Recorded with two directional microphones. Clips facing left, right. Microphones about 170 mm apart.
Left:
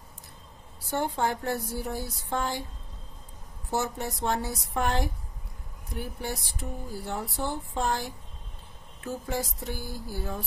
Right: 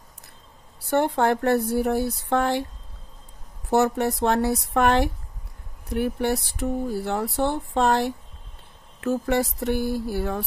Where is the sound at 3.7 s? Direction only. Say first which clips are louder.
Right 10 dB; 65° right (ahead or behind).